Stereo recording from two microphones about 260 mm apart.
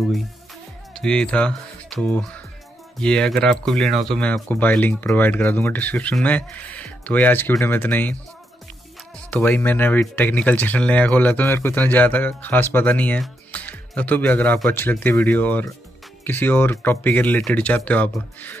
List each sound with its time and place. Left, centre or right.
0.9 s speech: centre
9.3 s speech: centre